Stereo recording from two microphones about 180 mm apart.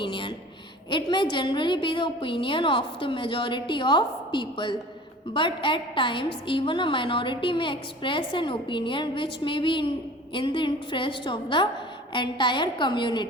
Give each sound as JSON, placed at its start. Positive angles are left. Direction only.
{"t": 0.0, "sound": "a woman's voice", "side_deg": 25}